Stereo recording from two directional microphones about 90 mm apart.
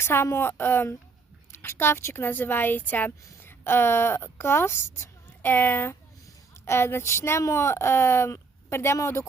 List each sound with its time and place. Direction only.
0.0 s speech: 25° left (ahead or behind)